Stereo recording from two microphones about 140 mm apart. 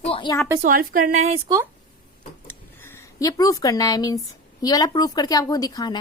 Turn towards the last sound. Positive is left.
turn(degrees=30)  # may be behind; listen again after turning